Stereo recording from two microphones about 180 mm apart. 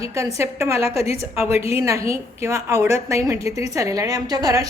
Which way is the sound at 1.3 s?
15° right (ahead or behind).